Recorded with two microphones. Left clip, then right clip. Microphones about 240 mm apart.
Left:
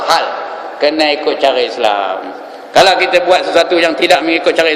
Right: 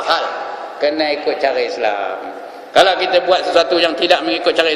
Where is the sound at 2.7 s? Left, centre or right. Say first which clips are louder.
Left 3 dB; centre.